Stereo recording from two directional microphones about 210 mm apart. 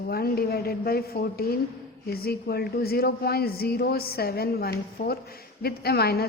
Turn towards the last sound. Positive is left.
turn(degrees=50)  # may be behind; listen again after turning